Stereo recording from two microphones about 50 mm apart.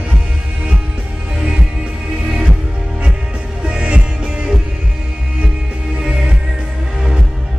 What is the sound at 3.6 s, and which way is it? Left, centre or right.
Music, centre.